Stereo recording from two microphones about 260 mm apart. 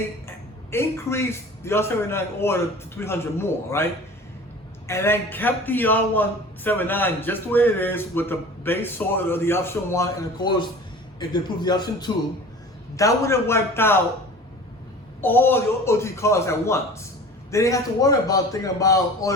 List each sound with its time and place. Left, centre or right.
0.7 s a man's voice: centre
4.9 s a man's voice: centre
15.2 s a man's voice: centre